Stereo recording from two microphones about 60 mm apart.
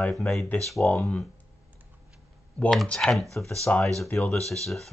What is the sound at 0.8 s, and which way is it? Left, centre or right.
Speech, left.